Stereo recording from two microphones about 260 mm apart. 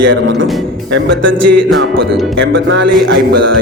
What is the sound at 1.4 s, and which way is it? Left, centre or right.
Music, right.